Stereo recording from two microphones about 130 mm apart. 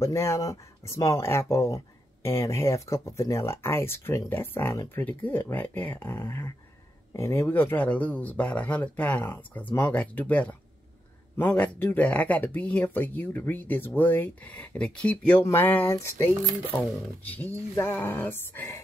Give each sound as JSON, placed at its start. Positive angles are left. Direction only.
{"t": 0.0, "sound": "speech", "side_deg": 20}